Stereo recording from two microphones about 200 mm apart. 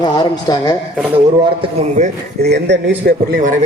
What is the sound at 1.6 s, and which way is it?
Speech, 25° right (ahead or behind).